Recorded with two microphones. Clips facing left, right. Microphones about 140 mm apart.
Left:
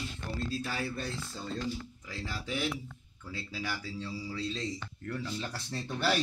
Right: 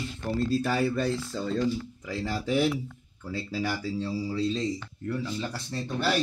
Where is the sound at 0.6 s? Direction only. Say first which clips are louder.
Right 10 dB; 70° right (ahead or behind).